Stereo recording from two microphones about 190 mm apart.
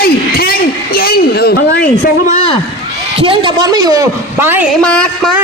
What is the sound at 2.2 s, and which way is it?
Speech, 35° left (ahead or behind).